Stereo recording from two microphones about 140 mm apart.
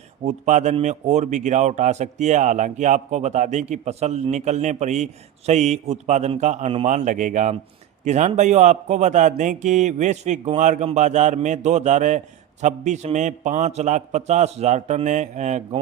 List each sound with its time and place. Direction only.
0.3 s a man's voice: 60° right (ahead or behind)